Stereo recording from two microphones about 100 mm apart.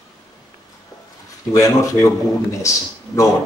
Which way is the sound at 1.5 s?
35° left (ahead or behind).